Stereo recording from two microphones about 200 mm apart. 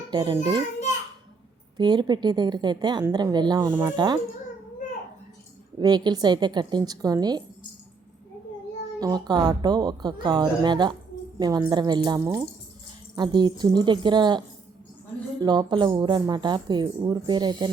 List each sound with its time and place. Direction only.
0.1 s a child's voice: 25° right (ahead or behind)
1.8 s speech: 20° right (ahead or behind)
5.8 s speech: 20° right (ahead or behind)
9.0 s speech: 20° right (ahead or behind)